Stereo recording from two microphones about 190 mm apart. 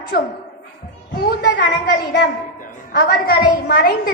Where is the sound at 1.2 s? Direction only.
60° left (ahead or behind).